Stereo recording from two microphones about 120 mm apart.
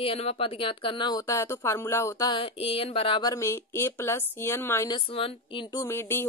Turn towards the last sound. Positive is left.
turn(degrees=20)  # may be behind; listen again after turning